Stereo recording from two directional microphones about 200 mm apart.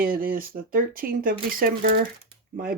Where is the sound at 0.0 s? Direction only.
45° right (ahead or behind).